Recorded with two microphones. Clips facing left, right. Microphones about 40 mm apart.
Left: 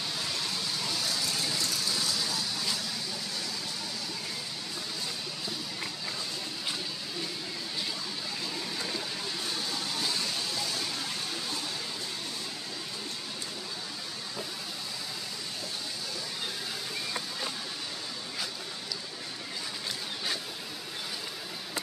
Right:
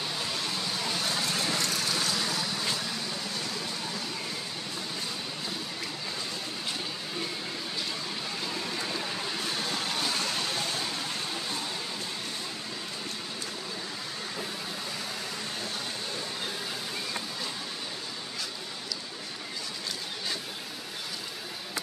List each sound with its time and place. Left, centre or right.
0.8 s vehicle: right
10.4 s vehicle: right